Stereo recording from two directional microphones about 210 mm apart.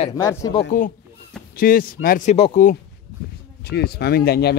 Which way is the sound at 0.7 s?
40° left (ahead or behind).